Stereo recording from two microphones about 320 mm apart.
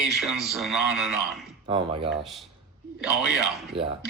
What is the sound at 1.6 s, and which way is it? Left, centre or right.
Speech, centre.